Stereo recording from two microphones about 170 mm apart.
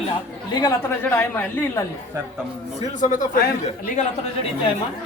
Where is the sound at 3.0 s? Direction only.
50° left (ahead or behind).